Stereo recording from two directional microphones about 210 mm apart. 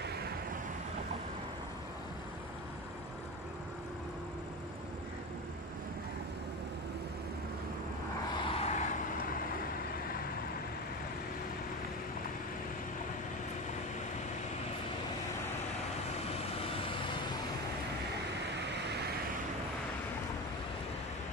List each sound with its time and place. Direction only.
0.0 s vehicle: 50° right (ahead or behind)
8.4 s vehicle: 25° left (ahead or behind)
16.3 s vehicle: 25° left (ahead or behind)